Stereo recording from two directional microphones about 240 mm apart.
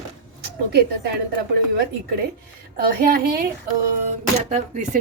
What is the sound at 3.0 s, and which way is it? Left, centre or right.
Speech, right.